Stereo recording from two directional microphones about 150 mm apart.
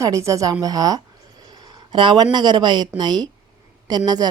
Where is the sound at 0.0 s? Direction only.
20° right (ahead or behind).